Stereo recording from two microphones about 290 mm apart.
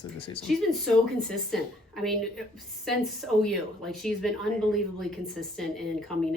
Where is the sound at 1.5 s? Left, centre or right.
Centre.